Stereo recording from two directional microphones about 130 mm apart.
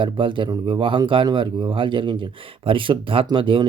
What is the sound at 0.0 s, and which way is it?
Speech, 40° right (ahead or behind).